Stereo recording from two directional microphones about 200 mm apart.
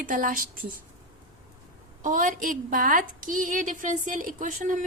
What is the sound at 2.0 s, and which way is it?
A woman's voice, 40° right (ahead or behind).